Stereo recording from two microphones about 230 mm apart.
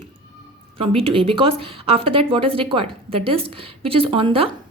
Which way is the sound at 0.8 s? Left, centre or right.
Right.